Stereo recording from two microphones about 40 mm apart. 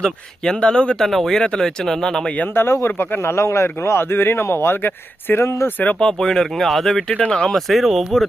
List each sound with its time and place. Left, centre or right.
0.0 s speech: left
1.0 s speech: centre
2.5 s speech: left
6.0 s speech: centre
7.1 s speech: left
7.5 s speech: centre